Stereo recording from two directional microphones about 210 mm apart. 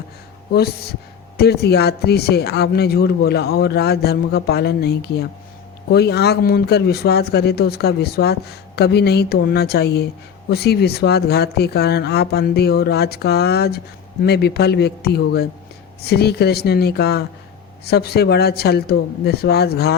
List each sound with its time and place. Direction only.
0.5 s speech: 50° left (ahead or behind)